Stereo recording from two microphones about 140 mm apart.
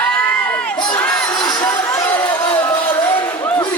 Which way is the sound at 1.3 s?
30° left (ahead or behind).